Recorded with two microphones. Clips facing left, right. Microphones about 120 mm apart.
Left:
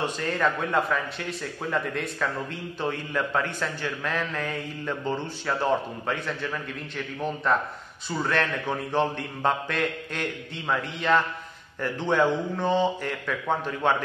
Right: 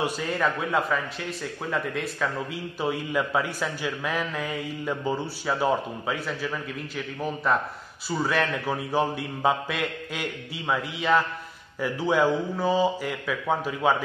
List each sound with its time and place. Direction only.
0.0 s a man's voice: 5° right (ahead or behind)